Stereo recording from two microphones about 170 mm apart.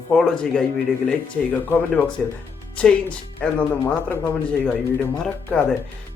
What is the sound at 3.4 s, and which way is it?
Speech, 10° left (ahead or behind).